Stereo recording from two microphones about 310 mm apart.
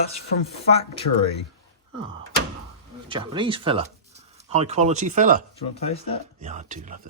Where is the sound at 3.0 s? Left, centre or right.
Centre.